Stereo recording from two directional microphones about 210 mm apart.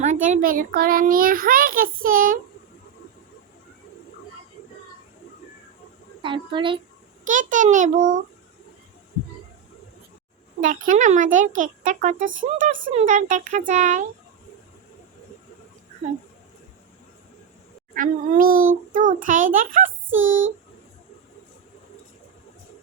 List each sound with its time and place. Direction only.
0.0 s a child's voice: 35° right (ahead or behind)
6.2 s a child's voice: 25° right (ahead or behind)
7.3 s a child's voice: 40° right (ahead or behind)
10.8 s a child's voice: 35° right (ahead or behind)
17.9 s a child's voice: 40° right (ahead or behind)
20.1 s a sound: 65° right (ahead or behind)